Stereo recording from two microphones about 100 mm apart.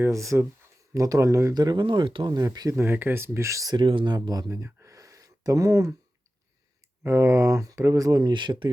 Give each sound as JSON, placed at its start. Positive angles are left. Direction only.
{"t": 0.0, "sound": "speech", "side_deg": -30}
{"t": 1.5, "sound": "speech", "side_deg": -45}
{"t": 2.3, "sound": "speech", "side_deg": -35}
{"t": 2.7, "sound": "speech", "side_deg": -20}
{"t": 3.8, "sound": "speech", "side_deg": -55}
{"t": 7.0, "sound": "speech", "side_deg": -30}